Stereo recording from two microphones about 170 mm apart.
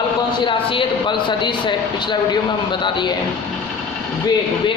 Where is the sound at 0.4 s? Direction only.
30° left (ahead or behind).